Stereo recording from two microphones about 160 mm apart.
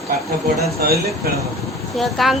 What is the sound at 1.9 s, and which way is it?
Speech, centre (ahead or behind).